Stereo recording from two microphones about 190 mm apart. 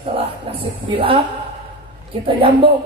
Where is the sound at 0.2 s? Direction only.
30° right (ahead or behind).